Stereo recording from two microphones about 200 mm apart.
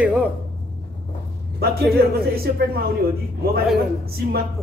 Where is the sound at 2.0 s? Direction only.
50° right (ahead or behind).